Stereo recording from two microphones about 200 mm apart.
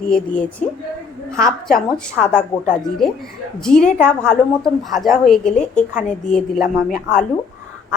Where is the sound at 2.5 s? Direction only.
15° left (ahead or behind).